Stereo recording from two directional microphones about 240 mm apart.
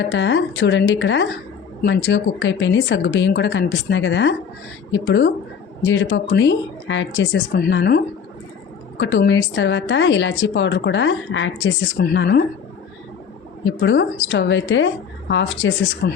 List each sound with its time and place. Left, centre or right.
0.0 s a woman's voice: left
13.7 s a woman's voice: left